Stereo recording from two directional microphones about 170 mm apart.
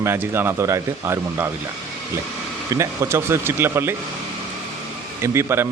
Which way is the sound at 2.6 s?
15° right (ahead or behind).